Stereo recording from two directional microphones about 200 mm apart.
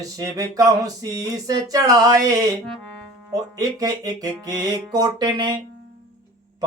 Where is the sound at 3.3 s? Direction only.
15° right (ahead or behind).